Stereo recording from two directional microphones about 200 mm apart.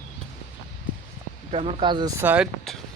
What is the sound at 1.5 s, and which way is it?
Speech, 30° right (ahead or behind).